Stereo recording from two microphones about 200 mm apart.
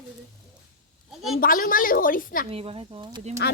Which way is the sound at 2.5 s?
30° right (ahead or behind).